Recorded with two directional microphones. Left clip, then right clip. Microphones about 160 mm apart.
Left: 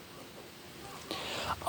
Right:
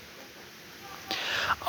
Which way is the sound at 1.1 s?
15° left (ahead or behind).